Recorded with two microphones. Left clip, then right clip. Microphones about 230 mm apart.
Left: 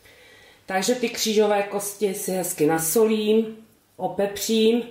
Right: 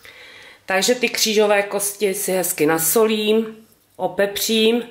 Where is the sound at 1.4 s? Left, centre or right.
Centre.